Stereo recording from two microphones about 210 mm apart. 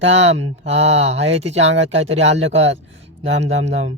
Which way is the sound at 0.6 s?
30° right (ahead or behind).